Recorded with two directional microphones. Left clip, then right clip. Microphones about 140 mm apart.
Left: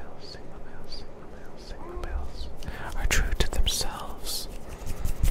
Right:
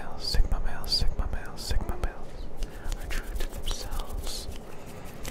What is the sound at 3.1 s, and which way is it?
Whispering, 55° left (ahead or behind).